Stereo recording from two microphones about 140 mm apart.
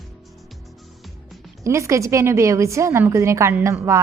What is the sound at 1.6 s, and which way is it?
A woman's voice, 20° right (ahead or behind).